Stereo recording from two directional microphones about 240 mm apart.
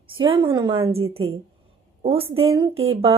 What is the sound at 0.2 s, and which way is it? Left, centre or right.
A woman's voice, right.